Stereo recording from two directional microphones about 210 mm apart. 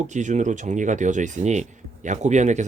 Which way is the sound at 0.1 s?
35° right (ahead or behind).